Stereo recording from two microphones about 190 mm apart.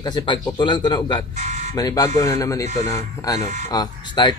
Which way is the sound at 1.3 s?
40° right (ahead or behind).